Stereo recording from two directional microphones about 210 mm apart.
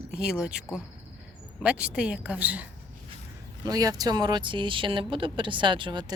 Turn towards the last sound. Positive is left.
turn(degrees=-20)  # may be behind; listen again after turning